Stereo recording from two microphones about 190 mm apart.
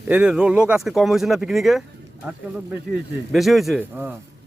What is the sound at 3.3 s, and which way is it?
Speech, centre (ahead or behind).